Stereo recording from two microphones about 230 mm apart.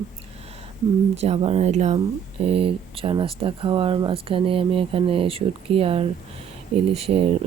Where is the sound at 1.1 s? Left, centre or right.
Right.